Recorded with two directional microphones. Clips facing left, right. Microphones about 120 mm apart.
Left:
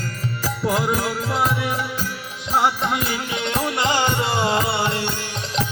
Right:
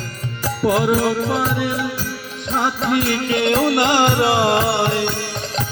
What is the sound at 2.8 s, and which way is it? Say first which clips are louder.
Music: right 5 dB; 75° right (ahead or behind).